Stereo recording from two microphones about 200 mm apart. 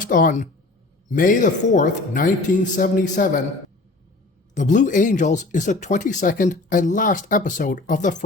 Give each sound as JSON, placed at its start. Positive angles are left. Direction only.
{"t": 0.0, "sound": "speech", "side_deg": 40}
{"t": 4.5, "sound": "speech", "side_deg": 40}